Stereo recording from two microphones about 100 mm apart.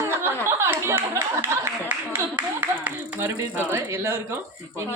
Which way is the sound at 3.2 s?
25° right (ahead or behind).